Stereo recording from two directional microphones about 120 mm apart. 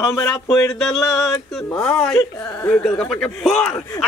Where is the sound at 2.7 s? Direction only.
10° left (ahead or behind).